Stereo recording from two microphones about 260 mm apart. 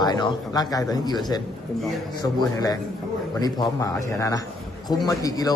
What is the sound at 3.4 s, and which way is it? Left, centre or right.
A man's voice, centre.